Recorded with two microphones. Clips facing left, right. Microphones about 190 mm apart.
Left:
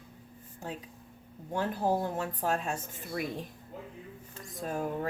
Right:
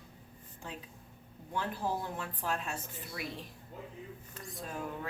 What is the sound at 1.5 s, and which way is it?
A woman's voice, 45° left (ahead or behind).